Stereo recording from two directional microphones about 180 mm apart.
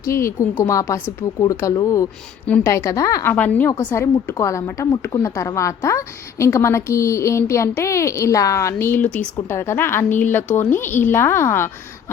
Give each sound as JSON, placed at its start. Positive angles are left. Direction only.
{"t": 0.0, "sound": "a woman's voice", "side_deg": 15}